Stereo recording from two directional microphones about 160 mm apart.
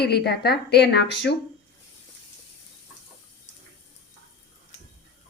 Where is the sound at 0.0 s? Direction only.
85° left.